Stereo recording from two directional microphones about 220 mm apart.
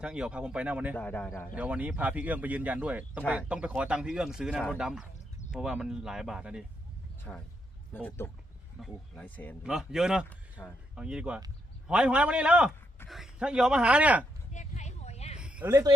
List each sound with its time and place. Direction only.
0.0 s speech: 5° right (ahead or behind)
0.9 s speech: 5° left (ahead or behind)
1.5 s speech: 5° right (ahead or behind)
9.6 s speech: 5° right (ahead or behind)
14.5 s a sound: 35° left (ahead or behind)
15.4 s a sound: 5° right (ahead or behind)